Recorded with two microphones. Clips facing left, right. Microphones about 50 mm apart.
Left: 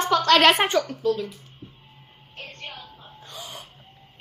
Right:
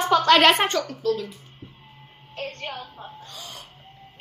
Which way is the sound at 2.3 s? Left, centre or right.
Right.